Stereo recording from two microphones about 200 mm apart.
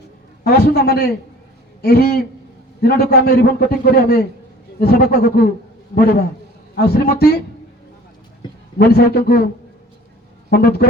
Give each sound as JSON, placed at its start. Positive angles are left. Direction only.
{"t": 0.4, "sound": "a man's voice", "side_deg": 50}
{"t": 8.9, "sound": "a man's voice", "side_deg": 50}
{"t": 10.5, "sound": "a man's voice", "side_deg": 50}